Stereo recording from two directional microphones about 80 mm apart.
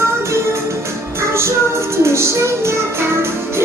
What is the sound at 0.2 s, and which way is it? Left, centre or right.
Music, right.